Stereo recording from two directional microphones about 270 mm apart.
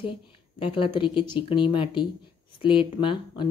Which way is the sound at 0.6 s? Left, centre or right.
Centre.